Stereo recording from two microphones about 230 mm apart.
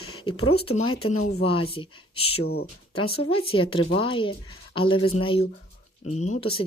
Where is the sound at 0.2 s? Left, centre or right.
Left.